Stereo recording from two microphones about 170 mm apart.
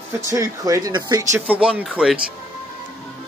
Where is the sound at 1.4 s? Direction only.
5° right (ahead or behind).